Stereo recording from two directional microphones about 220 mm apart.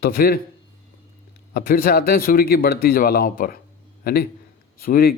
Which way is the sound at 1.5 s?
40° left (ahead or behind).